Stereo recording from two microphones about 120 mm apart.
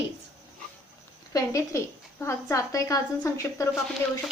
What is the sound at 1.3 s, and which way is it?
A woman's voice, 25° left (ahead or behind).